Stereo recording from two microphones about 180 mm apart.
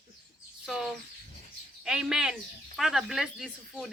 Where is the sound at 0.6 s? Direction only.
Centre (ahead or behind).